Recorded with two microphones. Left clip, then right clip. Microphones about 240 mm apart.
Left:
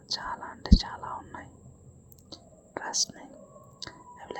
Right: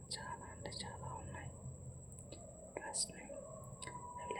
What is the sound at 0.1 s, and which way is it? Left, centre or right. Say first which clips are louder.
Whispering: left 13 dB; left.